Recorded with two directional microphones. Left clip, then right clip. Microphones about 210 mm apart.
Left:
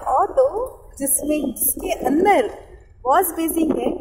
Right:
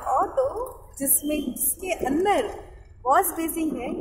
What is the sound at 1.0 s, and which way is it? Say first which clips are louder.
A woman's voice: left 5 dB; 10° left (ahead or behind).